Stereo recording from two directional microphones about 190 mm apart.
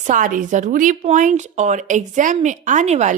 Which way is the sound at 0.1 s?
45° right (ahead or behind).